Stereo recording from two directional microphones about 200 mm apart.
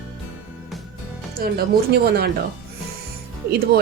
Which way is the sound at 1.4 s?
50° right (ahead or behind).